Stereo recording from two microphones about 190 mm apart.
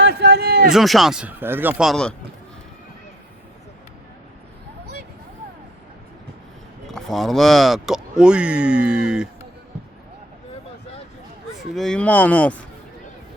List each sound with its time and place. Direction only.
0.0 s a sound: 60° right (ahead or behind)
0.7 s speech: centre (ahead or behind)
6.8 s speech: centre (ahead or behind)
11.7 s speech: centre (ahead or behind)